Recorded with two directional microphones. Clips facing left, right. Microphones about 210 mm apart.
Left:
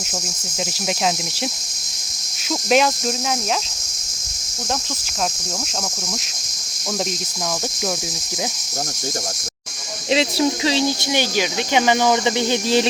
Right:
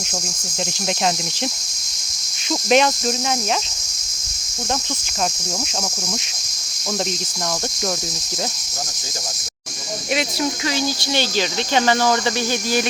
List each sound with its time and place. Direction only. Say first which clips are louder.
2.6 s cricket: right 1 dB; centre (ahead or behind)
10.1 s speech: left 4 dB; 25° left (ahead or behind)